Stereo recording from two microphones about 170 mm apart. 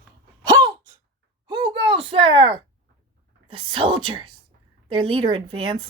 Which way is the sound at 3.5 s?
30° right (ahead or behind).